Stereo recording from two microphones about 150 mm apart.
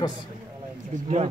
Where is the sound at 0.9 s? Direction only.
45° right (ahead or behind).